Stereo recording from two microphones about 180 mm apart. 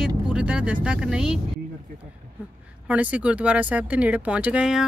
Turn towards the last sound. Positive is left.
turn(degrees=-5)  # may be behind; listen again after turning